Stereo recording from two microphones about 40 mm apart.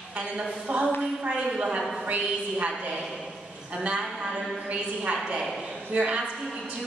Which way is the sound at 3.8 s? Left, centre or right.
Right.